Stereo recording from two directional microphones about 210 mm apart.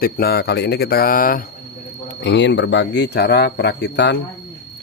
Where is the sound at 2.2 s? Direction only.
60° left (ahead or behind).